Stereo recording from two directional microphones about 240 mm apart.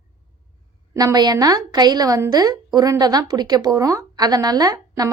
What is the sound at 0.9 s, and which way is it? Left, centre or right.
A woman's voice, centre.